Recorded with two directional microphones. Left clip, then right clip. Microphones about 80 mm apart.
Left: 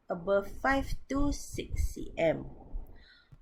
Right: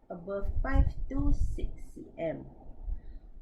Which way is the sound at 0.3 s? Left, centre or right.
Left.